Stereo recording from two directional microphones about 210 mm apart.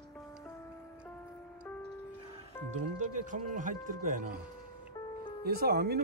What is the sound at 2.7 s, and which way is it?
Speech, 35° right (ahead or behind).